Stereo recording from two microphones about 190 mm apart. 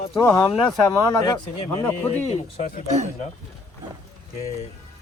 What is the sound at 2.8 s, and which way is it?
Speech, 35° right (ahead or behind).